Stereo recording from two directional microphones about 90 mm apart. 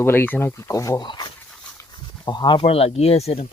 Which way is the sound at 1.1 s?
60° left (ahead or behind).